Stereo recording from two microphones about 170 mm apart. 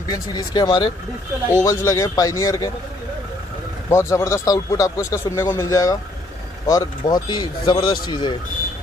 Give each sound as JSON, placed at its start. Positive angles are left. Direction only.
{"t": 0.1, "sound": "speech", "side_deg": 25}
{"t": 3.9, "sound": "speech", "side_deg": 15}